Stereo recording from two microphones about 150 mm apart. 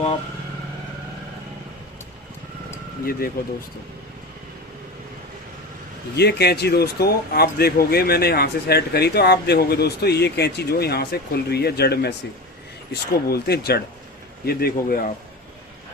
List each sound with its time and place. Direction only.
6.1 s speech: 90° left; by 15.1 s 75° left (ahead or behind)